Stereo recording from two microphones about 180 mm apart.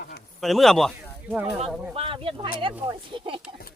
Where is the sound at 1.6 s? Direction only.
30° right (ahead or behind).